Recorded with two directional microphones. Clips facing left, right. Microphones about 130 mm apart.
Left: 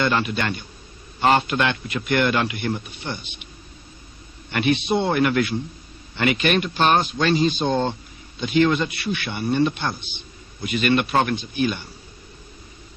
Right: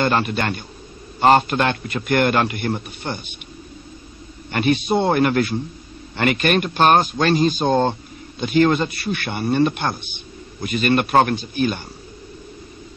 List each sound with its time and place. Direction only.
0.0 s a man's voice: 45° right (ahead or behind)
4.5 s a man's voice: 45° right (ahead or behind)